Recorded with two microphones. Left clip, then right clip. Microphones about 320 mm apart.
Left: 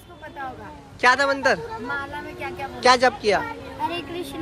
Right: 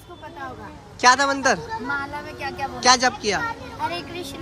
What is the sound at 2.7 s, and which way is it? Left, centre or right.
Speech, centre.